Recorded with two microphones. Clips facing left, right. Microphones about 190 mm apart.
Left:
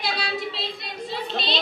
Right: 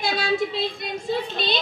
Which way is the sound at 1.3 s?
50° right (ahead or behind).